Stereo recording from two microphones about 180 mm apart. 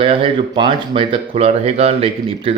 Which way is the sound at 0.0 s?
30° right (ahead or behind).